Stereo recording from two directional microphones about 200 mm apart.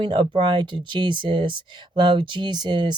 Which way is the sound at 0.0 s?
25° right (ahead or behind).